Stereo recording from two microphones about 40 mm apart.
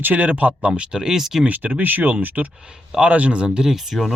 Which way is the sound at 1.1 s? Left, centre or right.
Centre.